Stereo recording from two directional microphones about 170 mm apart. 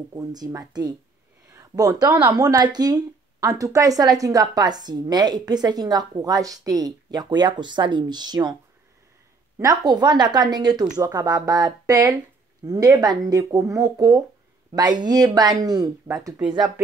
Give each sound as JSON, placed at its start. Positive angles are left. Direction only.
{"t": 0.1, "sound": "a woman's voice", "side_deg": -20}
{"t": 9.6, "sound": "a woman's voice", "side_deg": -20}